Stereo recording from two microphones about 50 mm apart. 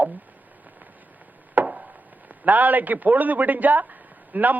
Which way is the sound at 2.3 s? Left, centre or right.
Right.